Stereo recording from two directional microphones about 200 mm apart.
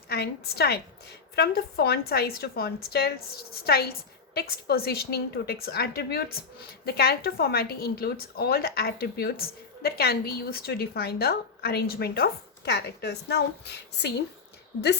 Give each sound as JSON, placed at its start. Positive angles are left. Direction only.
{"t": 0.1, "sound": "a woman's voice", "side_deg": 50}